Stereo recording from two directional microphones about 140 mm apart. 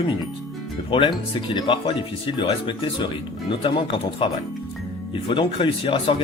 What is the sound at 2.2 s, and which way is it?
Speech, 35° left (ahead or behind).